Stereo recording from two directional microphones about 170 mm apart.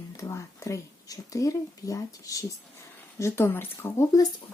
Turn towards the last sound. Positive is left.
turn(degrees=15)  # may be behind; listen again after turning